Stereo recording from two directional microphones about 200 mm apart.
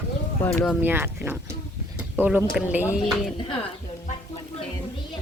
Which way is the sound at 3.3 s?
25° left (ahead or behind).